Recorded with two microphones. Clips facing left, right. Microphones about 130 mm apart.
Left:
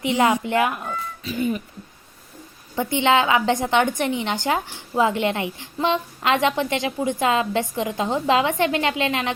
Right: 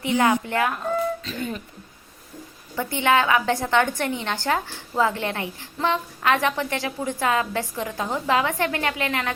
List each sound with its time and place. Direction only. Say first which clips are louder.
0.0 s speech: left 1 dB; 20° left (ahead or behind)
2.7 s a woman's voice: left 2 dB; 20° left (ahead or behind)